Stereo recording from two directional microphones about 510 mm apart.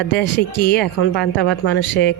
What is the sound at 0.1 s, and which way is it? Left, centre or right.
Speech, centre.